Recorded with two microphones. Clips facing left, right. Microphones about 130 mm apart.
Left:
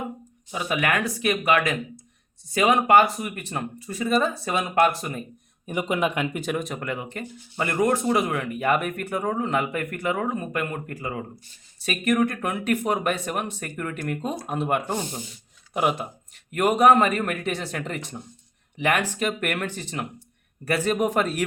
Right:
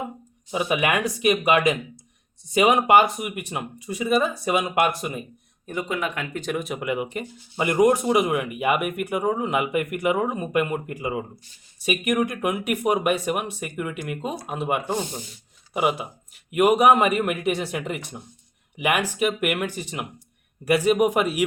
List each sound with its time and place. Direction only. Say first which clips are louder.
0.5 s speech: right 2 dB; 20° right (ahead or behind)
5.6 s speech: left 3 dB; 20° left (ahead or behind)
6.4 s speech: right 1 dB; centre (ahead or behind)